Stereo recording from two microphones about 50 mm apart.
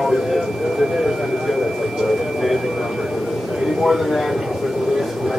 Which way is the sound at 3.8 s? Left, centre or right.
Centre.